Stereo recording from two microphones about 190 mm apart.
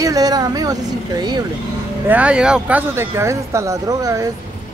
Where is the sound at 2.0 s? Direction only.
5° right (ahead or behind).